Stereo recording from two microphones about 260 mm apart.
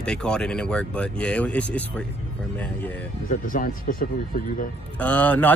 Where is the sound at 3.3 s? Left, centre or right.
Left.